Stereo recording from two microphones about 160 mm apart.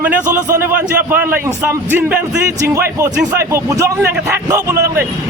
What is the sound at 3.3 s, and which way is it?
A man's voice, 20° right (ahead or behind).